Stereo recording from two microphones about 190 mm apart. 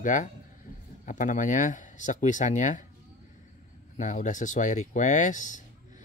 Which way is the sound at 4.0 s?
40° left (ahead or behind).